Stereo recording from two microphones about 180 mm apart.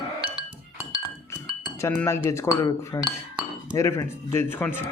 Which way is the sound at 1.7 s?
15° left (ahead or behind).